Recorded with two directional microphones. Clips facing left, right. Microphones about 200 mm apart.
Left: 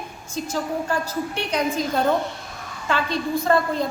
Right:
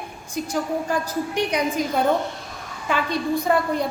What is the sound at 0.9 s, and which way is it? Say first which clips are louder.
A woman's voice: right 1 dB; 15° right (ahead or behind).